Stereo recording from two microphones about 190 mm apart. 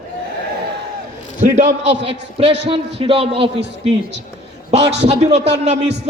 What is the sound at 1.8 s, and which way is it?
Speech, 70° right (ahead or behind).